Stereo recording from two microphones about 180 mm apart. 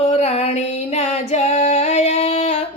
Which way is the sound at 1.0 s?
40° left (ahead or behind).